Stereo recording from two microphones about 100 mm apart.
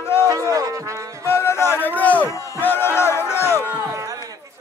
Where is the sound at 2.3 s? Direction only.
30° left (ahead or behind).